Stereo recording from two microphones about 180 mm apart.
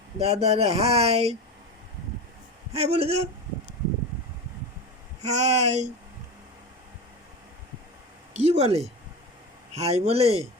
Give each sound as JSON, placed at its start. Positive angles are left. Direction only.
{"t": 0.2, "sound": "speech", "side_deg": -35}
{"t": 2.7, "sound": "speech", "side_deg": -35}
{"t": 5.2, "sound": "speech", "side_deg": -40}
{"t": 8.3, "sound": "speech", "side_deg": -40}